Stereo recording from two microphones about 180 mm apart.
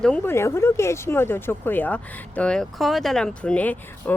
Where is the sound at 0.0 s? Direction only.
10° left (ahead or behind).